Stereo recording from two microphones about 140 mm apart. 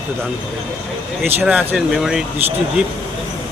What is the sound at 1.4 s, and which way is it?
Speech, 10° right (ahead or behind).